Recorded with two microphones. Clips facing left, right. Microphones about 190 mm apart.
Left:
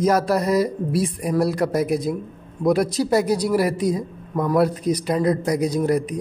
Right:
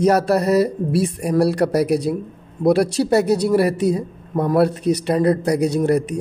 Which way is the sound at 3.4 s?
30° right (ahead or behind).